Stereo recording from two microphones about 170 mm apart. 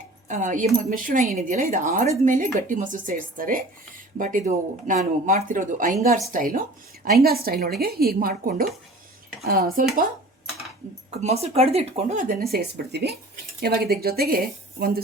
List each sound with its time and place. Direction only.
0.3 s a woman's voice: 45° right (ahead or behind)
11.2 s a woman's voice: 40° right (ahead or behind); by 15.0 s 60° right (ahead or behind)